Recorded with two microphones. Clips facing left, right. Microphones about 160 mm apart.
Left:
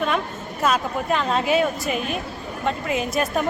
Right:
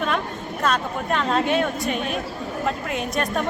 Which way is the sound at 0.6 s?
5° left (ahead or behind).